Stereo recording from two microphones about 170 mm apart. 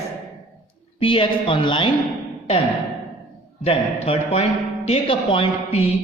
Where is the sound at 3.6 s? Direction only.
35° left (ahead or behind).